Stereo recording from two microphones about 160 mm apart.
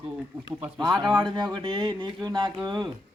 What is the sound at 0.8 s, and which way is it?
Speech, 25° right (ahead or behind).